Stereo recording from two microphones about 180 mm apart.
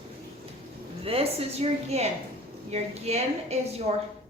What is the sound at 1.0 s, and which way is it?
Speech, 35° right (ahead or behind).